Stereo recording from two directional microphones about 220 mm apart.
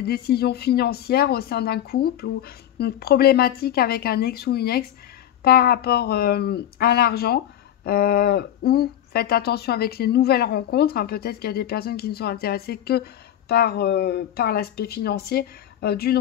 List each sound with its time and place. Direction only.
0.0 s speech: 45° left (ahead or behind)